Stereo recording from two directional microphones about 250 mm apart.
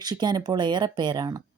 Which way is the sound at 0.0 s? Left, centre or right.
Centre.